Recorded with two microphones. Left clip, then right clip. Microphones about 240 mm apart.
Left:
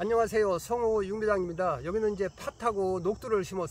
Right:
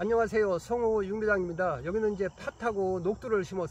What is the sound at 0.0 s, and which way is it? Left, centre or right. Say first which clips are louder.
Speech: even; centre.